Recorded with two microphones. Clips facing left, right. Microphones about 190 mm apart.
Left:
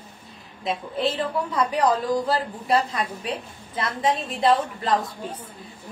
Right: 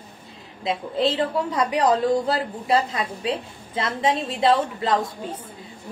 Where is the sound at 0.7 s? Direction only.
25° right (ahead or behind).